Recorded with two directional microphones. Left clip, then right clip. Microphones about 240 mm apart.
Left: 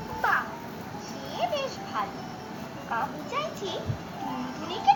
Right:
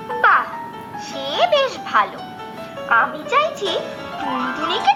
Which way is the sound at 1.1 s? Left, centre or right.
Centre.